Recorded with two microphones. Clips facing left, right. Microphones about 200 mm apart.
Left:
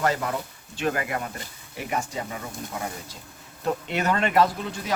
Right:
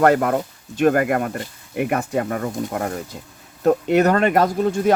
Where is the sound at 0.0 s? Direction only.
55° right (ahead or behind).